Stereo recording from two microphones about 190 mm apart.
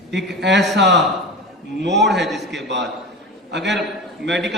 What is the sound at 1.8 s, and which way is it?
Speech, 65° right (ahead or behind).